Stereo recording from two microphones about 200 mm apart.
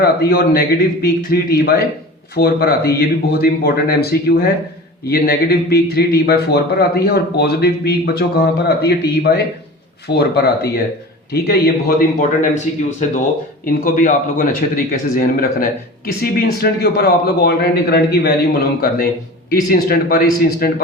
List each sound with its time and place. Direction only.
0.0 s speech: 50° left (ahead or behind)
19.5 s speech: 45° left (ahead or behind)